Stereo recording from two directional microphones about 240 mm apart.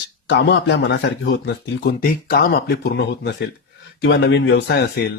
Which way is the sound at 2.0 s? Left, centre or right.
Left.